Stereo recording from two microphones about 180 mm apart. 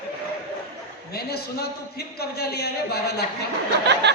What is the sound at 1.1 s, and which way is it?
A man's voice, 60° left (ahead or behind).